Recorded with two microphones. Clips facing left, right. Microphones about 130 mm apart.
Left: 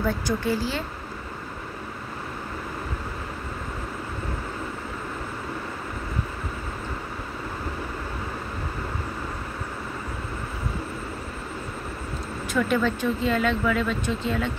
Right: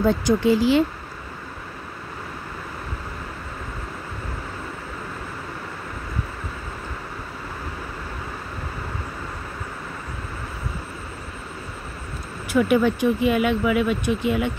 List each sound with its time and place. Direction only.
0.0 s speech: 20° right (ahead or behind)
12.5 s speech: 15° right (ahead or behind)